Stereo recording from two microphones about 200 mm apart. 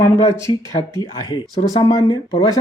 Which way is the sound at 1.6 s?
20° left (ahead or behind).